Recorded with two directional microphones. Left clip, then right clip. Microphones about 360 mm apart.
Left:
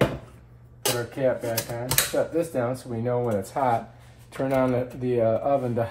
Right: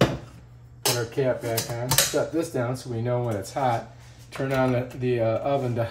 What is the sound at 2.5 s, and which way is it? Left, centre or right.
Speech, centre.